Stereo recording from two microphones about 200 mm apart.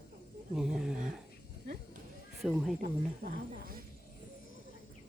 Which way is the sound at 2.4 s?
Centre (ahead or behind).